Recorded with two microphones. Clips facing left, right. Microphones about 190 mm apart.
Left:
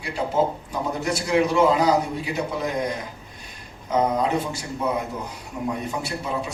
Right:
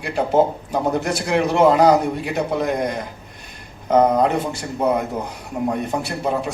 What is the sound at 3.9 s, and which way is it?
Speech, 55° right (ahead or behind).